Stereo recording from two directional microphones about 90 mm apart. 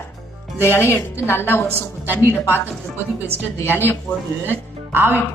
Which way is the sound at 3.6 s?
25° left (ahead or behind).